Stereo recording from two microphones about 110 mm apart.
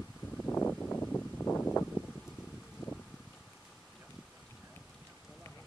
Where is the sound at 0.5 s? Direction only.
15° left (ahead or behind).